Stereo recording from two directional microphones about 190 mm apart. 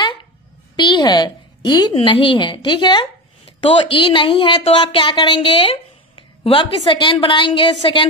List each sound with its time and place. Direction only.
0.7 s a woman's voice: 25° left (ahead or behind)